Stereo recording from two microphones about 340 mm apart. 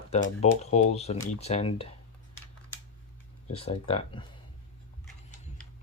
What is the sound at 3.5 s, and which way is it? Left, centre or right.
Speech, centre.